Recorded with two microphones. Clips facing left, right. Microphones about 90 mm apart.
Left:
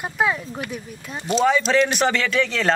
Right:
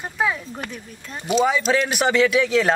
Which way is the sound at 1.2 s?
5° right (ahead or behind).